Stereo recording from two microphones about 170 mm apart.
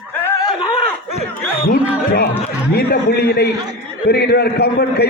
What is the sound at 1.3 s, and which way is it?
Speech, 55° left (ahead or behind).